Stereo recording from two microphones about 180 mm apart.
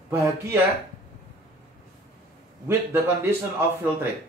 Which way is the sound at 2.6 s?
15° right (ahead or behind).